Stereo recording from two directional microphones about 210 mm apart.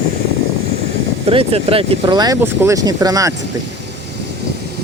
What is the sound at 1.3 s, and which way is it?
Speech, 25° right (ahead or behind).